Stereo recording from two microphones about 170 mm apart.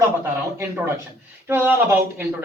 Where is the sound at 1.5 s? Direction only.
10° right (ahead or behind).